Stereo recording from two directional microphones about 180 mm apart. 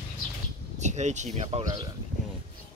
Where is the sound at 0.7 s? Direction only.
40° right (ahead or behind).